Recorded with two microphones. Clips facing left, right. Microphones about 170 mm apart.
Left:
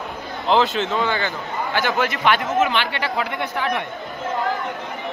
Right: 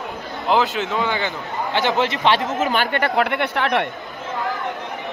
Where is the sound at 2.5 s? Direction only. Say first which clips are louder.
Even; 40° right (ahead or behind); by 3.8 s 65° right (ahead or behind).